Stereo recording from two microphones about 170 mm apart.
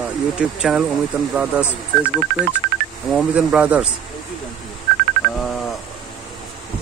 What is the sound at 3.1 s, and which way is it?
Speech, 5° right (ahead or behind).